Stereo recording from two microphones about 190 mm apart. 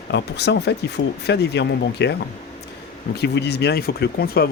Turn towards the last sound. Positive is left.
turn(degrees=55)  # may be behind; listen again after turning